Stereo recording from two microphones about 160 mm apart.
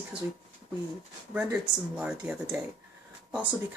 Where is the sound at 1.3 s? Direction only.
10° right (ahead or behind).